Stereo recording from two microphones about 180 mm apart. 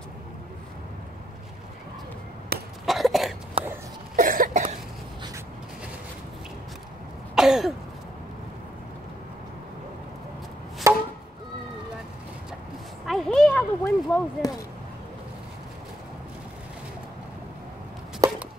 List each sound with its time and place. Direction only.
2.8 s cough: centre (ahead or behind)
3.6 s a sound: 30° right (ahead or behind)
4.2 s cough: 50° right (ahead or behind)
7.3 s throat clearing: centre (ahead or behind)
10.9 s chop: 15° right (ahead or behind)
13.0 s a sound: centre (ahead or behind)